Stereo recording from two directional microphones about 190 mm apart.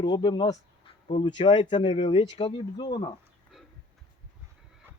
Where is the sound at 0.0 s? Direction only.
25° left (ahead or behind).